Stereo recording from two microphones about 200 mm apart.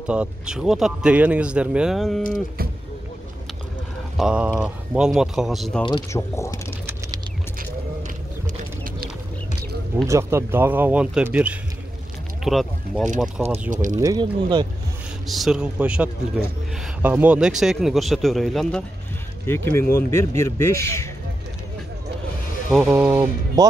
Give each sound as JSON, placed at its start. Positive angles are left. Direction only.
{"t": 0.0, "sound": "speech", "side_deg": -5}
{"t": 4.2, "sound": "speech", "side_deg": -5}
{"t": 5.8, "sound": "speech", "side_deg": 20}
{"t": 10.0, "sound": "speech", "side_deg": -15}
{"t": 13.7, "sound": "speech", "side_deg": -40}
{"t": 13.9, "sound": "speech", "side_deg": -20}
{"t": 15.2, "sound": "speech", "side_deg": 0}
{"t": 22.7, "sound": "speech", "side_deg": 0}
{"t": 22.9, "sound": "speech", "side_deg": -10}